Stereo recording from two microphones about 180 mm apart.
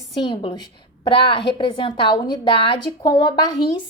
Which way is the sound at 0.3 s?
25° left (ahead or behind).